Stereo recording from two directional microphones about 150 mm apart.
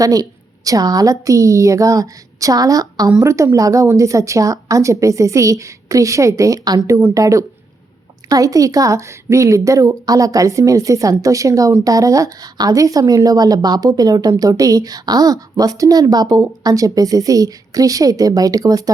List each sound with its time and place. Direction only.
0.0 s speech: 25° right (ahead or behind)